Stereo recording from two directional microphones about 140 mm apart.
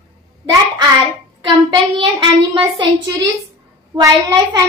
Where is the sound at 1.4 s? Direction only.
35° right (ahead or behind).